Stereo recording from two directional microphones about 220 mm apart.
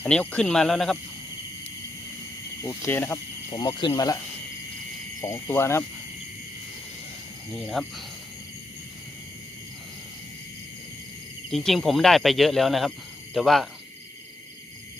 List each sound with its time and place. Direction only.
0.0 s speech: 5° left (ahead or behind)
2.6 s speech: 10° left (ahead or behind)
5.2 s speech: 10° left (ahead or behind)
7.5 s speech: centre (ahead or behind)
11.5 s speech: centre (ahead or behind)